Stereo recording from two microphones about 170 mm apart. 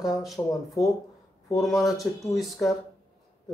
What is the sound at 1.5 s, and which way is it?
Speech, centre (ahead or behind).